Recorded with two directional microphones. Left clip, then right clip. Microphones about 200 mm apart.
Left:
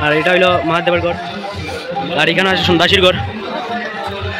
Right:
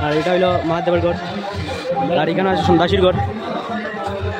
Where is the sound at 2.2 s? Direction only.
5° right (ahead or behind).